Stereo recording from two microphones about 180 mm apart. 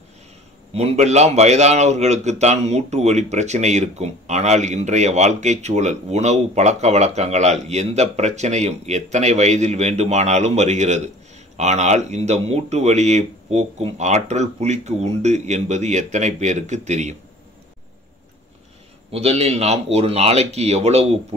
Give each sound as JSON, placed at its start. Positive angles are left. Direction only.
{"t": 0.7, "sound": "a man's voice", "side_deg": -40}
{"t": 19.1, "sound": "a man's voice", "side_deg": -35}